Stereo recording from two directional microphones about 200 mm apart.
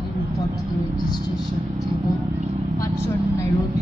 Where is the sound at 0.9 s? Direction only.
20° left (ahead or behind).